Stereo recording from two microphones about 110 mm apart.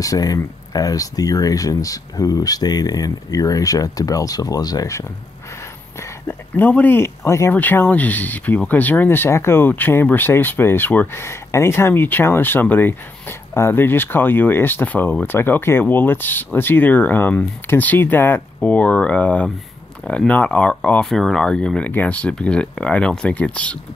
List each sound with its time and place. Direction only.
0.0 s speech: 30° left (ahead or behind); by 23.8 s 10° left (ahead or behind)